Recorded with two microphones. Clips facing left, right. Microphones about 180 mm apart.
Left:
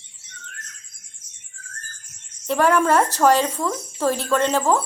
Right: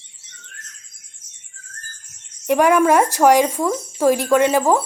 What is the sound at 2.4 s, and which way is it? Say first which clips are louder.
Speech: right 4 dB; 15° right (ahead or behind).